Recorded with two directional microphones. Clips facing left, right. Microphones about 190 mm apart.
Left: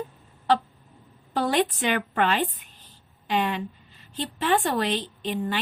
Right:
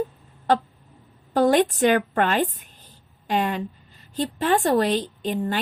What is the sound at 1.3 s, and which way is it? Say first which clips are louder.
A woman's voice: right 6 dB; 45° right (ahead or behind).